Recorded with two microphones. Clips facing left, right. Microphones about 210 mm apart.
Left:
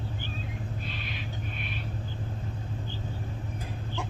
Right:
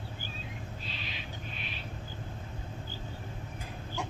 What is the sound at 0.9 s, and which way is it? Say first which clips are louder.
Owl: left 4 dB; 50° left (ahead or behind).